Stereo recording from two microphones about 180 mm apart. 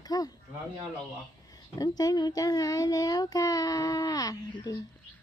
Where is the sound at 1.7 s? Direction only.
20° left (ahead or behind).